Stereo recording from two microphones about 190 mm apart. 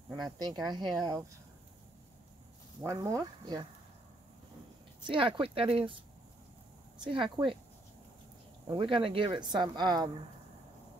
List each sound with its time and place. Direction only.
0.1 s speech: 20° right (ahead or behind)
2.8 s speech: 15° right (ahead or behind)
5.1 s speech: 30° right (ahead or behind)
7.0 s speech: 25° right (ahead or behind)
8.6 s speech: 25° right (ahead or behind)